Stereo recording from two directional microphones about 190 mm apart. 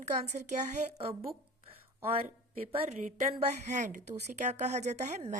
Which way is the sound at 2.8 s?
40° right (ahead or behind).